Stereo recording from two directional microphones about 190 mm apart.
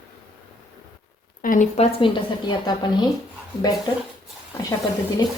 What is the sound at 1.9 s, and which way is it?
A woman's voice, 25° left (ahead or behind).